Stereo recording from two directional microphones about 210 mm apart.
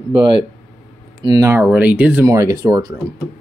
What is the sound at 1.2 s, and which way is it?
Speech, 10° right (ahead or behind).